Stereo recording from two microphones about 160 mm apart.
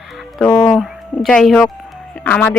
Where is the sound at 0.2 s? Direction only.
Centre (ahead or behind).